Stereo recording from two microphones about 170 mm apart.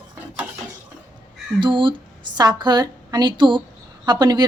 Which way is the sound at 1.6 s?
30° right (ahead or behind).